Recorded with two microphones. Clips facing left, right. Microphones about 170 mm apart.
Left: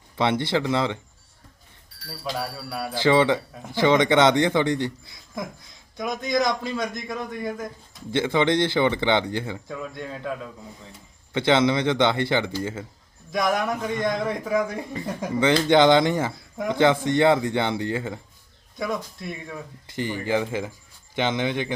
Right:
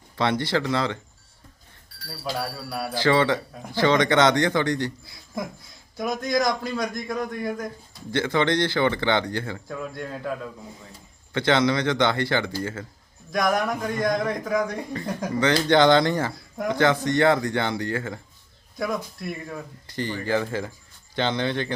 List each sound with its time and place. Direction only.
0.2 s speech: 20° left (ahead or behind)
2.6 s speech: 5° right (ahead or behind)
2.9 s speech: 20° left (ahead or behind)
6.0 s speech: centre (ahead or behind)
8.1 s speech: 20° left (ahead or behind)
9.6 s speech: centre (ahead or behind)
11.3 s speech: 20° left (ahead or behind)
13.3 s speech: centre (ahead or behind)
15.4 s speech: 20° left (ahead or behind)
18.8 s speech: centre (ahead or behind)
20.0 s speech: 15° left (ahead or behind)